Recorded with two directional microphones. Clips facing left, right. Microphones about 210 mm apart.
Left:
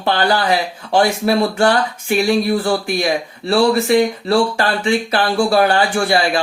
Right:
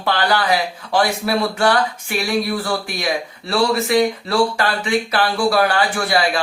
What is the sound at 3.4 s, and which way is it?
Speech, 30° left (ahead or behind).